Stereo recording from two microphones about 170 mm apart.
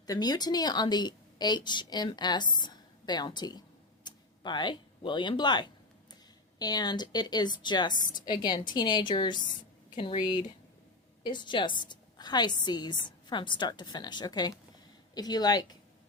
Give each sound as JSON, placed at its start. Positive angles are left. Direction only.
{"t": 0.1, "sound": "a woman's voice", "side_deg": 25}
{"t": 4.0, "sound": "a sound", "side_deg": 25}
{"t": 6.6, "sound": "a woman's voice", "side_deg": 25}